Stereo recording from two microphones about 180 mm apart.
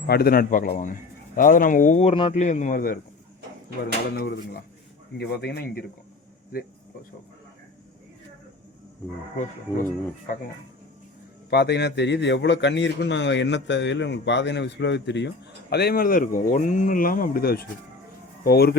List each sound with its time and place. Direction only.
0.1 s speech: 60° left (ahead or behind)
5.1 s speech: 65° left (ahead or behind)
9.4 s speech: 45° left (ahead or behind)
11.5 s a man's voice: 70° left (ahead or behind)
15.7 s speech: 60° left (ahead or behind)